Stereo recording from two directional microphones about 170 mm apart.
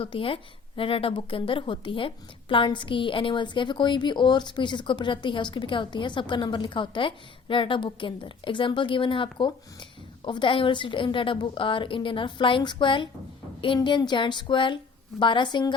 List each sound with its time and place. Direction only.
0.0 s a woman's voice: 30° left (ahead or behind)